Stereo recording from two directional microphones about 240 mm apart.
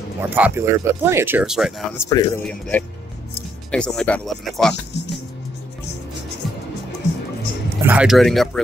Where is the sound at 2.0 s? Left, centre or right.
Centre.